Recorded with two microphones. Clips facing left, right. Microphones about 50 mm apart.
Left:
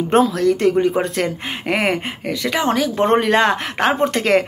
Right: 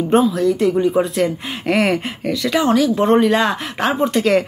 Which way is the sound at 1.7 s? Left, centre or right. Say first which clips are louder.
Right 3 dB; left.